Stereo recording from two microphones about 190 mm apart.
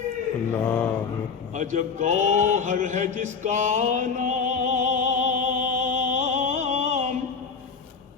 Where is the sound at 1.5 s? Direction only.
40° right (ahead or behind).